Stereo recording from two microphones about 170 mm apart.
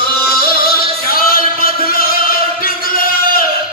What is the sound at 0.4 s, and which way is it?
Music, 60° left (ahead or behind).